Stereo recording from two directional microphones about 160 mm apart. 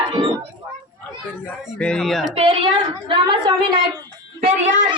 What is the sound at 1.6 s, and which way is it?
Speech, centre (ahead or behind).